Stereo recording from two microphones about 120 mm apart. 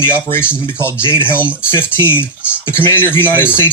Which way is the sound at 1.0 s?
40° right (ahead or behind).